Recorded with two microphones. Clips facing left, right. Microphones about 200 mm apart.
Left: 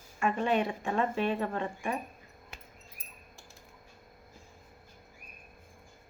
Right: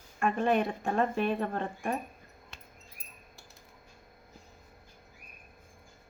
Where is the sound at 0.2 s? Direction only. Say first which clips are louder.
Right 1 dB; 55° right (ahead or behind).